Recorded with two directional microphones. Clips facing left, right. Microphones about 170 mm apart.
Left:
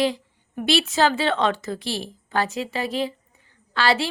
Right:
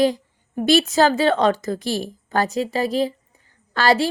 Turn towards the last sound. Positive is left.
turn(degrees=-45)  # may be behind; listen again after turning